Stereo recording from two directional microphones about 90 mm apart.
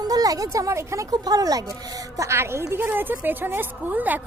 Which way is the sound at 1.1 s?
45° right (ahead or behind).